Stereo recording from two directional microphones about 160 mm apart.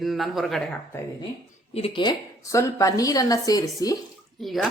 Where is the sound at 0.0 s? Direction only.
Centre (ahead or behind).